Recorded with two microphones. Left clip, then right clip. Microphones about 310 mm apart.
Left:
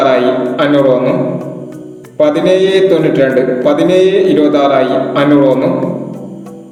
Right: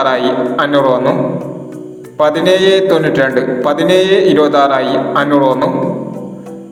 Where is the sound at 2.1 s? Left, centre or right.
Right.